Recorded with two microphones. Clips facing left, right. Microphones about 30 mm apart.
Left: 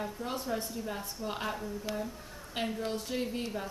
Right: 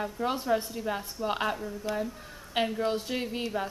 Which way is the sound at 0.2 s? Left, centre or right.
Right.